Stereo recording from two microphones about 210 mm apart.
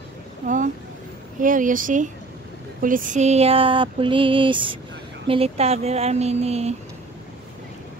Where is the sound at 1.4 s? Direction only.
40° right (ahead or behind).